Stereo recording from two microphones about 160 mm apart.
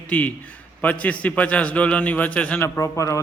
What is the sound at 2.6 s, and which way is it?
Mantra, 20° left (ahead or behind).